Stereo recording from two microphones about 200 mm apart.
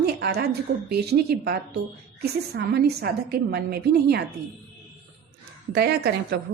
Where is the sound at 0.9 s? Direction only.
55° right (ahead or behind).